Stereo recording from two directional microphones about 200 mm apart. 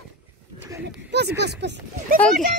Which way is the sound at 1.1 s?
55° right (ahead or behind).